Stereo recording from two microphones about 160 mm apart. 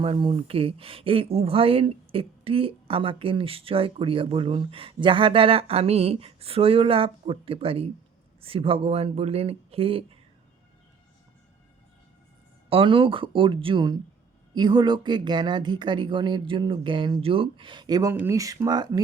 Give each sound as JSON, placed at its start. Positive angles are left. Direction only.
{"t": 0.0, "sound": "speech", "side_deg": -30}
{"t": 12.7, "sound": "speech", "side_deg": -35}